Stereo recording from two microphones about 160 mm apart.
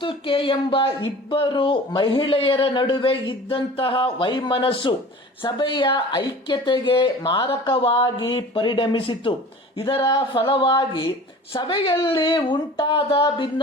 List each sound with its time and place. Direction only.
0.0 s speech: 35° left (ahead or behind)